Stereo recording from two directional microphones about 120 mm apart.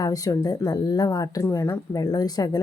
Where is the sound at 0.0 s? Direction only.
30° left (ahead or behind).